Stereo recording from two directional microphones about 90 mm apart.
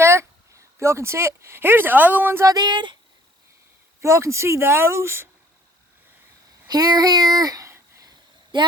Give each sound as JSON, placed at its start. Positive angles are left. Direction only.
{"t": 0.0, "sound": "speech", "side_deg": -30}
{"t": 2.4, "sound": "speech", "side_deg": -45}
{"t": 4.0, "sound": "speech", "side_deg": -30}
{"t": 6.7, "sound": "a sound", "side_deg": -45}